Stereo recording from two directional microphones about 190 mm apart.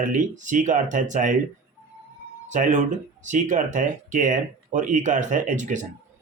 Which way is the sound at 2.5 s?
40° right (ahead or behind).